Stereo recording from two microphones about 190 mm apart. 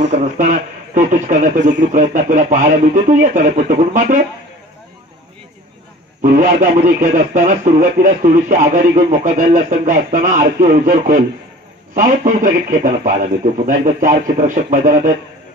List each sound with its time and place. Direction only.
0.1 s a man's voice: 40° right (ahead or behind)
6.2 s a man's voice: 45° right (ahead or behind)